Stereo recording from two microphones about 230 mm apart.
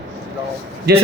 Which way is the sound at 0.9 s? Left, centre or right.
Right.